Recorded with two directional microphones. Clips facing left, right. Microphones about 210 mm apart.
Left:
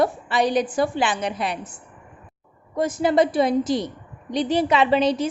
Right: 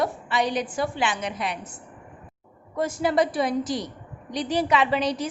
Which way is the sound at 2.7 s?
20° left (ahead or behind).